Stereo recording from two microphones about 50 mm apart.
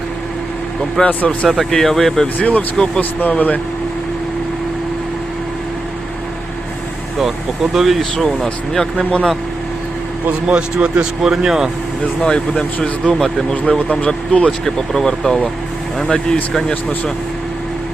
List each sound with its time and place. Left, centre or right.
1.0 s speech: left
1.5 s speech: centre
2.4 s speech: left
2.7 s speech: centre
3.0 s speech: left
7.2 s speech: centre
8.1 s speech: centre
10.4 s speech: right
11.2 s speech: centre
12.2 s speech: centre
14.6 s speech: centre